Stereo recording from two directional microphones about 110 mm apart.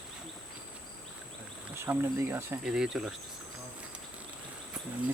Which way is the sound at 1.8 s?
20° right (ahead or behind).